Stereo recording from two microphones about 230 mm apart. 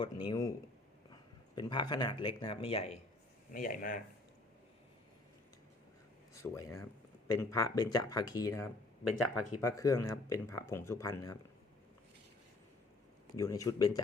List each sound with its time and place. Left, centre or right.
0.0 s speech: centre
1.5 s speech: centre
3.5 s speech: left
6.3 s speech: centre
13.3 s speech: centre